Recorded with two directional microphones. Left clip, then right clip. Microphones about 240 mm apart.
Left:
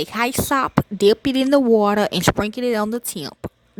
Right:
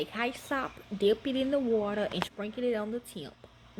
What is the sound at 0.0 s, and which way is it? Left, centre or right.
Speech, left.